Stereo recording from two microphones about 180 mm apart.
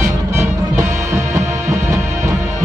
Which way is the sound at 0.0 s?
15° right (ahead or behind).